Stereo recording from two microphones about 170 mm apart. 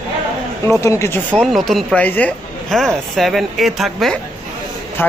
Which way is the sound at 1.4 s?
Centre (ahead or behind).